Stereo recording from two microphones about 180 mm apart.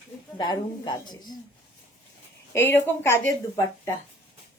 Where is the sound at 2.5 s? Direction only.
10° left (ahead or behind).